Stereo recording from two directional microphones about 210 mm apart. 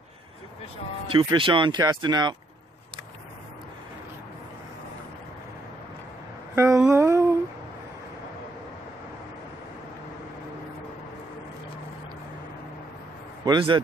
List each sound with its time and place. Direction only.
1.0 s speech: 25° right (ahead or behind)
6.5 s a sound: 10° right (ahead or behind)
13.5 s a man's voice: 25° right (ahead or behind)